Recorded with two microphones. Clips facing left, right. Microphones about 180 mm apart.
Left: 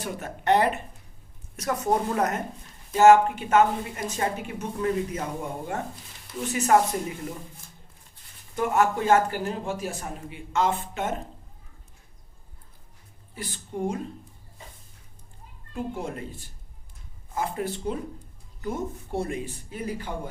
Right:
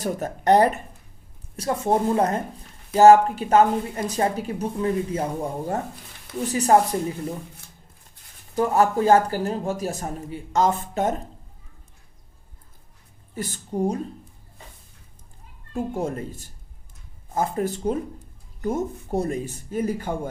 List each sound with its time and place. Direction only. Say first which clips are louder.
0.0 s a woman's voice: right 6 dB; 40° right (ahead or behind)
1.5 s a woman's voice: right 3 dB; 30° right (ahead or behind)
8.5 s a woman's voice: right 4 dB; 35° right (ahead or behind)
13.3 s a woman's voice: right 6 dB; 45° right (ahead or behind)
15.7 s speech: right 5 dB; 45° right (ahead or behind)